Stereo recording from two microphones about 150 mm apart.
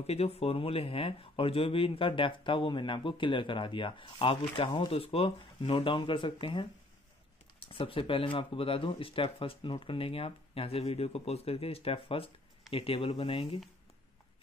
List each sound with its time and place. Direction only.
0.0 s speech: 45° left (ahead or behind)